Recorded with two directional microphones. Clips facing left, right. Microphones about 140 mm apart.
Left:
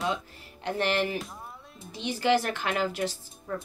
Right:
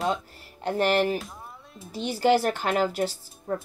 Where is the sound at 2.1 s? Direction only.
35° right (ahead or behind).